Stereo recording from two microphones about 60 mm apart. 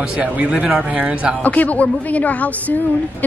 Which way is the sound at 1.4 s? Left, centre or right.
Left.